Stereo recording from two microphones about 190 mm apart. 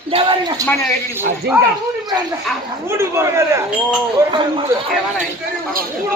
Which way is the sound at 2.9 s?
15° right (ahead or behind).